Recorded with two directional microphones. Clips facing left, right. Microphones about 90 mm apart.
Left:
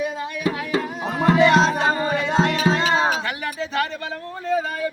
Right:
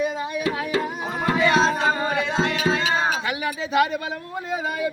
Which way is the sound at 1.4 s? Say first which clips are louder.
Left 4 dB; 65° left (ahead or behind).